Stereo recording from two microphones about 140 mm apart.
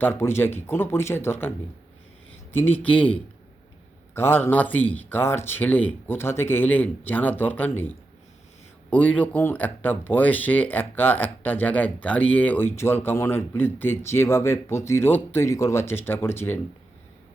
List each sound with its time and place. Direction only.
0.0 s speech: 15° left (ahead or behind)